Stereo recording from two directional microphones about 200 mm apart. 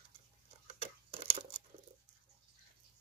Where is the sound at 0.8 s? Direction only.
30° right (ahead or behind).